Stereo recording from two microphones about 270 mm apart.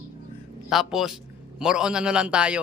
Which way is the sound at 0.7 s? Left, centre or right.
Centre.